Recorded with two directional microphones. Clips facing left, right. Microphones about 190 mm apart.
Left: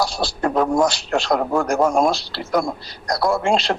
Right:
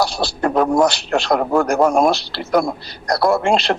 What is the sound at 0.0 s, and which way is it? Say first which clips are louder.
A man's voice: right 2 dB; 65° right (ahead or behind).